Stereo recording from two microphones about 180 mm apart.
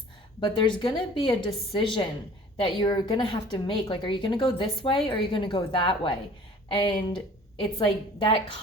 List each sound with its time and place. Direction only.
0.3 s a woman's voice: 30° left (ahead or behind)